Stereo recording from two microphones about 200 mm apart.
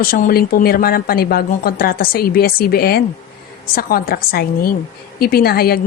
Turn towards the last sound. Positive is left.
turn(degrees=50)  # may be behind; listen again after turning